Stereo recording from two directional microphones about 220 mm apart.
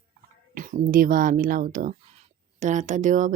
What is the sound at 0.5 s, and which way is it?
Speech, 40° right (ahead or behind).